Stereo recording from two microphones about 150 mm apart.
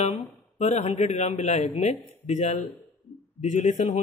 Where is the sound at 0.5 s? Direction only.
50° left (ahead or behind).